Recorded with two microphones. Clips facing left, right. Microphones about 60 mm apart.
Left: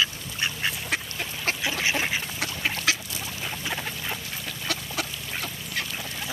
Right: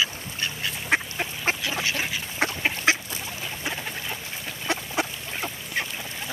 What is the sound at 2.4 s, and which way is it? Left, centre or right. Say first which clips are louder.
Duck: right 9 dB; right.